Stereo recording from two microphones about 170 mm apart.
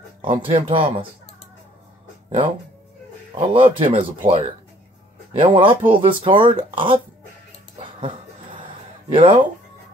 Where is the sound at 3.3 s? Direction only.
30° right (ahead or behind).